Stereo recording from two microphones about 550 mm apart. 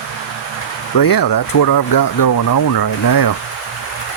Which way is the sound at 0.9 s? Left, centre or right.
Left.